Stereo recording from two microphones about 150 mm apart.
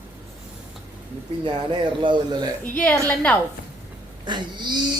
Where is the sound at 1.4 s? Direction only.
30° right (ahead or behind).